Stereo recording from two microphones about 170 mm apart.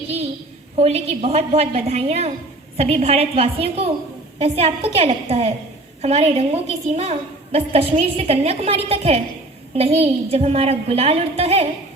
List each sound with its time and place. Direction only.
0.8 s a woman's voice: 35° right (ahead or behind)